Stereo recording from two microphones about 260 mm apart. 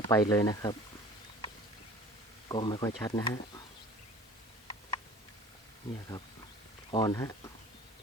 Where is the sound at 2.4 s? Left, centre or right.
Centre.